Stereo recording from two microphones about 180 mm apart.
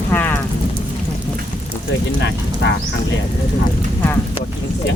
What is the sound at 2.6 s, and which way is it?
Speech, 85° left.